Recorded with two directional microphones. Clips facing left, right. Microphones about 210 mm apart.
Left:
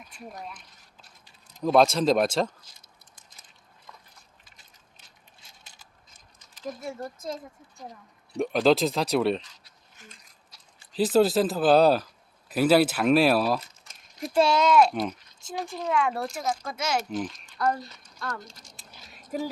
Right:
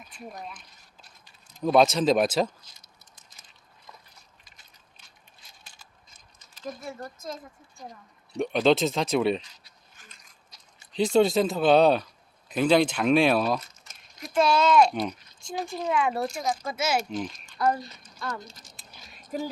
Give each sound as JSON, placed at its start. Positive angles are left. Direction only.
{"t": 0.3, "sound": "speech", "side_deg": 0}
{"t": 1.6, "sound": "speech", "side_deg": 0}
{"t": 2.7, "sound": "patter", "side_deg": 55}
{"t": 6.5, "sound": "a sound", "side_deg": 10}
{"t": 6.9, "sound": "speech", "side_deg": 25}
{"t": 8.4, "sound": "speech", "side_deg": 0}
{"t": 10.0, "sound": "biting", "side_deg": 25}
{"t": 10.9, "sound": "speech", "side_deg": 5}
{"t": 14.2, "sound": "a child's voice", "side_deg": 30}
{"t": 14.5, "sound": "speech", "side_deg": 10}
{"t": 18.4, "sound": "a sound", "side_deg": -5}